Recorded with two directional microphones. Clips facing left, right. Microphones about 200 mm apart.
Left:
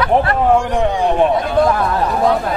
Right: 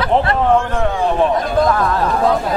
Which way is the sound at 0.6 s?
15° left (ahead or behind).